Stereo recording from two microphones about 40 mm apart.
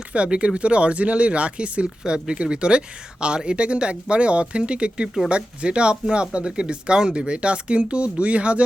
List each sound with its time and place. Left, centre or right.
0.1 s speech: right